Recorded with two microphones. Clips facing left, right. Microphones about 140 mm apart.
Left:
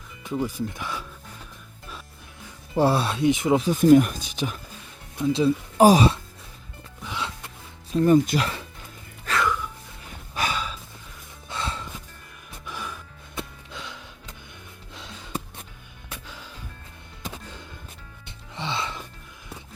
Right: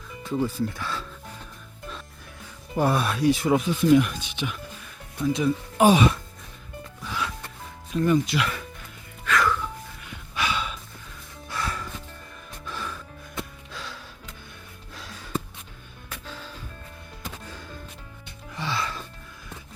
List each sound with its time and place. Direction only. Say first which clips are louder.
0.2 s speech: right 2 dB; 15° left (ahead or behind)
2.7 s speech: left 2 dB; 30° left (ahead or behind)
3.6 s speech: left 3 dB; 40° left (ahead or behind)
5.1 s speech: left 2 dB; 25° left (ahead or behind)
7.0 s music: right 1 dB; 20° left (ahead or behind)
7.9 s speech: left 4 dB; 40° left (ahead or behind)
9.3 s music: right 2 dB; 40° left (ahead or behind)
10.0 s snort: left 2 dB; 40° left (ahead or behind)
11.4 s music: even; 25° left (ahead or behind)
12.6 s music: right 1 dB; 15° left (ahead or behind)
14.9 s gasp: right 2 dB; 20° left (ahead or behind)
16.0 s music: right 2 dB; 15° left (ahead or behind)